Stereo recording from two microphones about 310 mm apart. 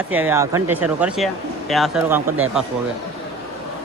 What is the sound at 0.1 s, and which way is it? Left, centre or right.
Speech, centre.